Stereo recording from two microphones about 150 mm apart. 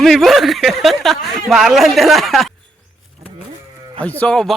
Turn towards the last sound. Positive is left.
turn(degrees=5)  # may be behind; listen again after turning